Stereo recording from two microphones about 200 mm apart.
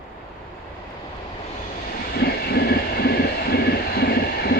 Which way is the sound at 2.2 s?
50° left (ahead or behind).